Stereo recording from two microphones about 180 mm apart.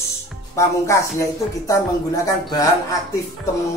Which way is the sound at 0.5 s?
15° left (ahead or behind).